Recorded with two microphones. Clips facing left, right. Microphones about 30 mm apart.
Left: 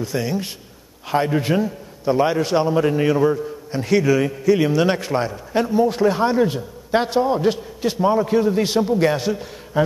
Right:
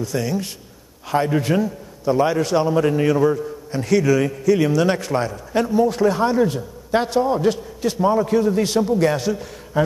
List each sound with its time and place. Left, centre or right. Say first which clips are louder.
0.0 s a man's voice: even; left